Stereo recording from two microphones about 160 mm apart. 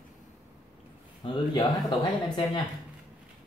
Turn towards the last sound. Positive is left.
turn(degrees=30)  # may be behind; listen again after turning